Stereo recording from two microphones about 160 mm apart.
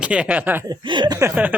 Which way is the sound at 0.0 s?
5° right (ahead or behind).